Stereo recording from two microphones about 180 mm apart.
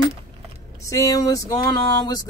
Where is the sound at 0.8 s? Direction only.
20° left (ahead or behind).